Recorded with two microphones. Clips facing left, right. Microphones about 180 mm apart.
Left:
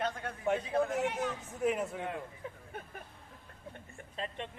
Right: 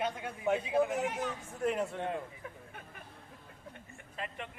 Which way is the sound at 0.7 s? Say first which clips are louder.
Right 1 dB; 5° right (ahead or behind).